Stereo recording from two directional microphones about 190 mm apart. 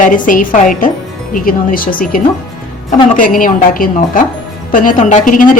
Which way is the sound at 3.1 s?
45° left (ahead or behind).